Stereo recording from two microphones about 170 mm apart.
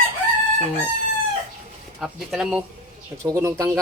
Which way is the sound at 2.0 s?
5° right (ahead or behind).